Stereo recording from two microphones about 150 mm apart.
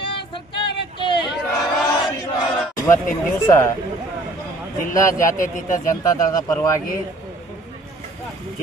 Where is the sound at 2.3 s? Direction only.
25° left (ahead or behind).